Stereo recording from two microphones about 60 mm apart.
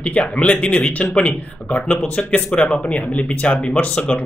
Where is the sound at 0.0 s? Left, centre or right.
Centre.